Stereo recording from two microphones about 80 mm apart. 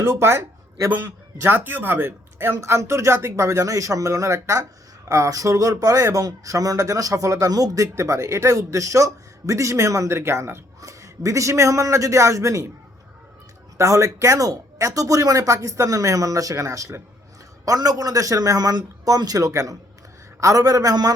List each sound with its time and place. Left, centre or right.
0.0 s speech: right
7.9 s speech: right
10.8 s speech: right
13.7 s speech: right